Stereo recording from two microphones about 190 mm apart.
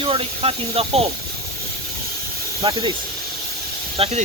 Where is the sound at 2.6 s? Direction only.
25° right (ahead or behind).